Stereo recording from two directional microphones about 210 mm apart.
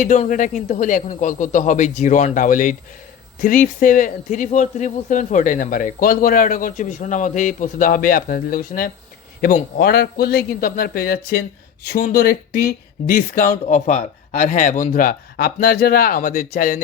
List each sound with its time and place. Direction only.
0.0 s a man's voice: 40° left (ahead or behind)